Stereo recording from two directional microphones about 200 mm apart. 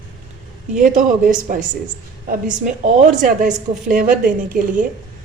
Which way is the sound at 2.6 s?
40° right (ahead or behind).